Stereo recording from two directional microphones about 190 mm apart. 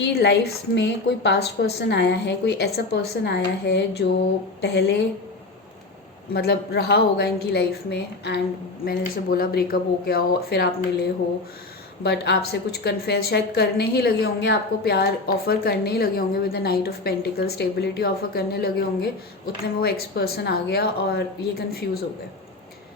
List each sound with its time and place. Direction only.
0.0 s a woman's voice: 60° left (ahead or behind)
6.3 s a woman's voice: 55° left (ahead or behind)
8.8 s a woman's voice: 50° left (ahead or behind)
12.0 s a woman's voice: 60° left (ahead or behind)